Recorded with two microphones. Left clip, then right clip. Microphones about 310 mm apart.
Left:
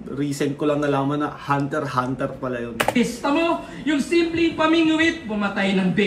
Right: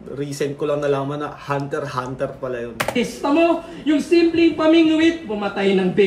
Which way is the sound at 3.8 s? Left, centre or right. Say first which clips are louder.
Right 5 dB; right.